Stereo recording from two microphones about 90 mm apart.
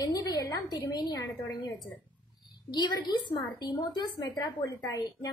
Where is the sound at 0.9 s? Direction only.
50° left (ahead or behind).